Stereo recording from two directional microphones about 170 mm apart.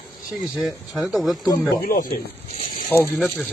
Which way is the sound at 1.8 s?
55° left (ahead or behind).